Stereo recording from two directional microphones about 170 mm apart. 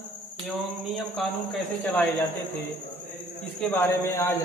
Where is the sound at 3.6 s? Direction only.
15° left (ahead or behind).